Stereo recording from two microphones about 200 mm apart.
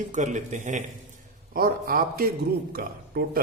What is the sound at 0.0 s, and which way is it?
A man's voice, 35° right (ahead or behind).